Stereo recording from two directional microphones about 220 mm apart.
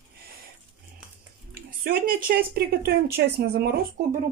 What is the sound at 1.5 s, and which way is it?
Speech, 40° right (ahead or behind).